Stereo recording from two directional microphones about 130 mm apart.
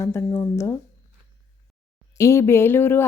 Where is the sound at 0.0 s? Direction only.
20° left (ahead or behind).